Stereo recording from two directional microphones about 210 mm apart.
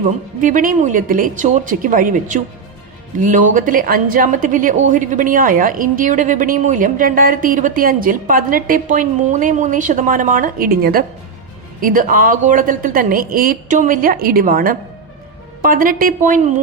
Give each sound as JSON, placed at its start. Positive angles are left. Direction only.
{"t": 0.4, "sound": "a woman's voice", "side_deg": -40}